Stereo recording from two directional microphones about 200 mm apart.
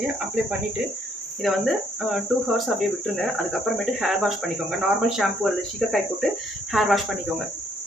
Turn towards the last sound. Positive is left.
turn(degrees=0)  # may be behind; listen again after turning